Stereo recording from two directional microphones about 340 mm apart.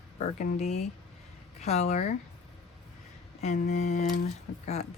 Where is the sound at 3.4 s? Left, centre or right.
Left.